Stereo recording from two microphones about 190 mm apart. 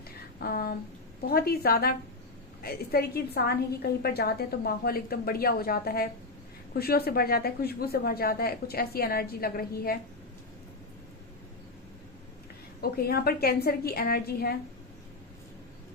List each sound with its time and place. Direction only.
0.3 s a sound: 50° left (ahead or behind)
1.3 s a woman's voice: 55° left (ahead or behind)
12.8 s speech: 55° left (ahead or behind)